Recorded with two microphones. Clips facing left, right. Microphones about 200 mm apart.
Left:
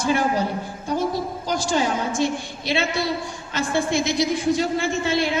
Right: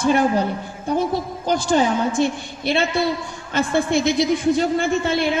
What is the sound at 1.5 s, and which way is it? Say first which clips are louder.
A man's voice: right 4 dB; 55° right (ahead or behind).